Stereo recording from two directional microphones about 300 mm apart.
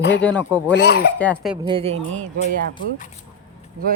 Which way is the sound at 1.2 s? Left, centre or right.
Centre.